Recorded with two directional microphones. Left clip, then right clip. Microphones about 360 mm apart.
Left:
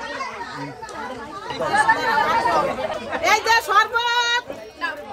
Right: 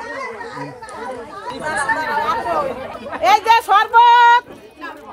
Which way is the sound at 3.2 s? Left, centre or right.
Centre.